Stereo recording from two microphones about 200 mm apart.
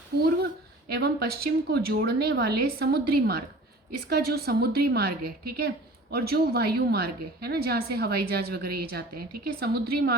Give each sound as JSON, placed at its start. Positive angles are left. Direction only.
{"t": 0.9, "sound": "a woman's voice", "side_deg": -55}